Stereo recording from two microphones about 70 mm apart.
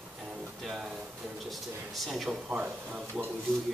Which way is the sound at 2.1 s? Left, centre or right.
Centre.